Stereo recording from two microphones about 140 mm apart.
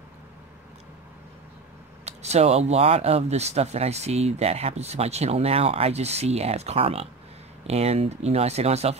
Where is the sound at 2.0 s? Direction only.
50° right (ahead or behind).